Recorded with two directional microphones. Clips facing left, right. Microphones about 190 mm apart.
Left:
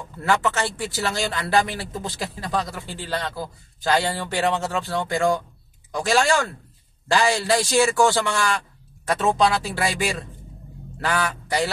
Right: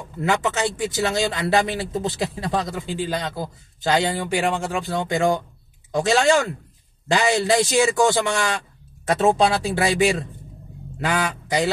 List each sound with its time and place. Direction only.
0.2 s speech: 20° right (ahead or behind)